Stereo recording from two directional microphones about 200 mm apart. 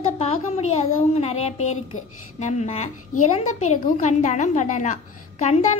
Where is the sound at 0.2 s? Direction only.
30° left (ahead or behind).